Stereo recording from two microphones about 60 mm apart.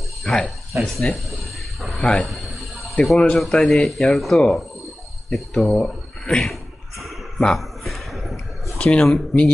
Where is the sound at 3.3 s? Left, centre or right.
Centre.